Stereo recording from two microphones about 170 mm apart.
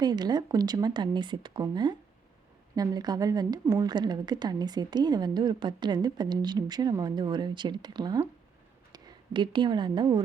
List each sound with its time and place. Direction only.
0.0 s a woman's voice: 25° right (ahead or behind)